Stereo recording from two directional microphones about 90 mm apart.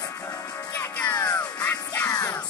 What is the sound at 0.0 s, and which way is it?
Music, 40° left (ahead or behind).